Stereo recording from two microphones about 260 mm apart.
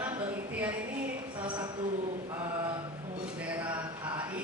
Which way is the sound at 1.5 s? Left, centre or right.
Centre.